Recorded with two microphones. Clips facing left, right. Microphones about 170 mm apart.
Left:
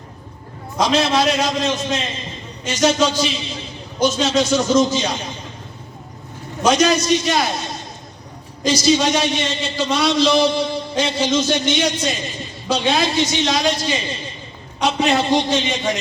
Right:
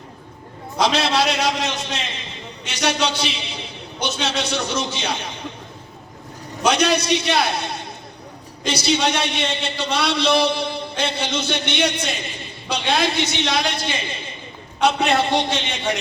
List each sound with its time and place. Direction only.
0.8 s a man's voice: 65° right (ahead or behind)
6.7 s a man's voice: 65° right (ahead or behind)